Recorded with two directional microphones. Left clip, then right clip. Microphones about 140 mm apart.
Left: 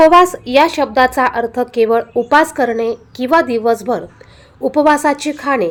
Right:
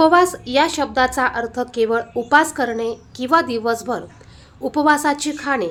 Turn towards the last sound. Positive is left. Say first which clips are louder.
# left 5 dB
turn(degrees=25)  # may be behind; listen again after turning